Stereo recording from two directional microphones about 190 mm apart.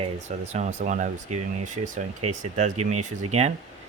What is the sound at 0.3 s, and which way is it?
Speech, 35° right (ahead or behind).